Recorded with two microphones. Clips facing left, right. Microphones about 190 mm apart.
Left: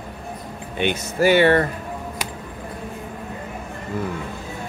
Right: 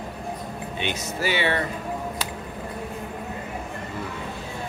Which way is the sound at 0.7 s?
55° left (ahead or behind).